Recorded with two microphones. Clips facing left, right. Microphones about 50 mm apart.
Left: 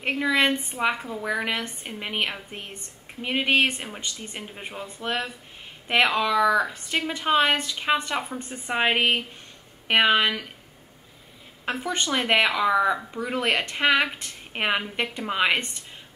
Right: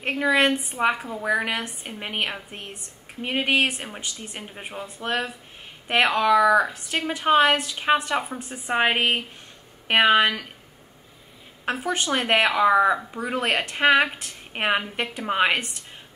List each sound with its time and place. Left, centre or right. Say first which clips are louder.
0.2 s a woman's voice: right 3 dB; centre
6.3 s speech: right 4 dB; right
6.6 s a woman's voice: right 1 dB; centre
11.9 s a woman's voice: right 1 dB; centre
12.5 s a woman's voice: right 3 dB; centre